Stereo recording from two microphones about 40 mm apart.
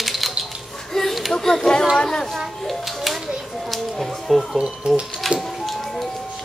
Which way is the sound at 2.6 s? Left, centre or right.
Centre.